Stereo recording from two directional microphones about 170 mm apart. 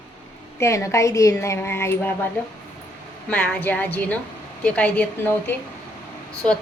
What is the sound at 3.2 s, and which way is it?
A woman's voice, 10° left (ahead or behind).